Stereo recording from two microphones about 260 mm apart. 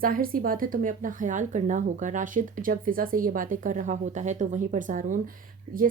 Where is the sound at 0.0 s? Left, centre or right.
Right.